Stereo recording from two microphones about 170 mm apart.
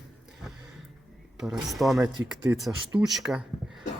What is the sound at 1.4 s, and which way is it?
Speech, 5° right (ahead or behind).